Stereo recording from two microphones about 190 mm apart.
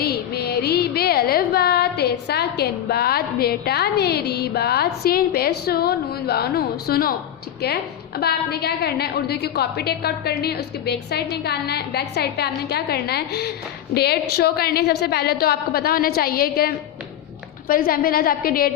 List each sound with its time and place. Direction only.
0.0 s a sound: 55° left (ahead or behind)
5.0 s a woman's voice: 55° left (ahead or behind)
8.2 s a woman's voice: 55° left (ahead or behind)